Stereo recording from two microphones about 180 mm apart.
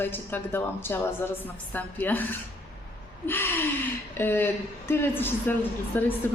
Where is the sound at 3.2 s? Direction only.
10° left (ahead or behind).